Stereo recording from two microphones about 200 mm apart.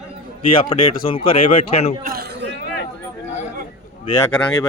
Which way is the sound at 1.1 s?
30° left (ahead or behind).